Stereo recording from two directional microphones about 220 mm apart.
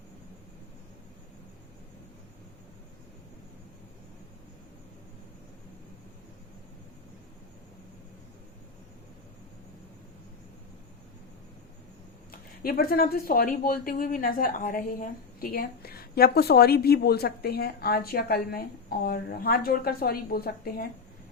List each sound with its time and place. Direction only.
12.3 s speech: 40° left (ahead or behind)